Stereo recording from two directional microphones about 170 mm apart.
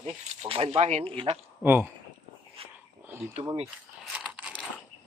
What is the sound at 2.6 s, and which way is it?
Dog, 35° right (ahead or behind).